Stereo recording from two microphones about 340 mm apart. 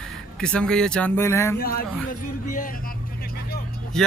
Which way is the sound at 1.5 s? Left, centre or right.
Left.